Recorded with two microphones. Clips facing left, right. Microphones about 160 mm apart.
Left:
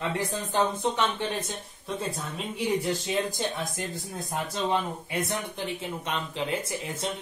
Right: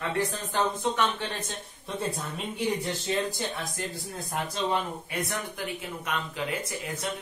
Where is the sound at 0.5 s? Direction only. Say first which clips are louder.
Left 1 dB; 20° left (ahead or behind).